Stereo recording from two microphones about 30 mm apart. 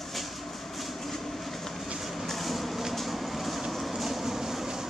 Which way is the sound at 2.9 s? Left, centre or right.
Centre.